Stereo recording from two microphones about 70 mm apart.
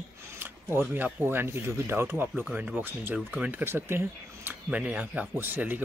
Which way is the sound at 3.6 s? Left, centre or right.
Right.